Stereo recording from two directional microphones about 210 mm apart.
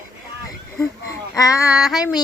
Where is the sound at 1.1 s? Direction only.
15° left (ahead or behind).